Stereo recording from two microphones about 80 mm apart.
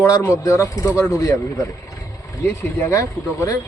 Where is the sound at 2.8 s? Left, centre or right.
Left.